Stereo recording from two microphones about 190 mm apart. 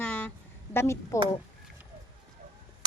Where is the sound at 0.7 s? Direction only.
15° left (ahead or behind).